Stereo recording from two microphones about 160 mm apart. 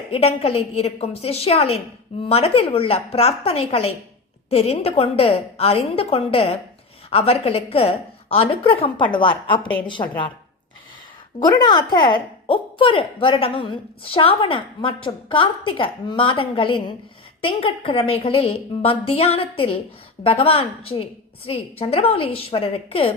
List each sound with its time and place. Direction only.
0.1 s a woman's voice: 40° left (ahead or behind)
11.4 s a woman's voice: 25° left (ahead or behind)